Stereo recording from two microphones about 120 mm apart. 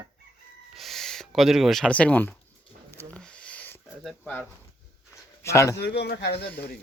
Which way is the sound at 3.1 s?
10° left (ahead or behind).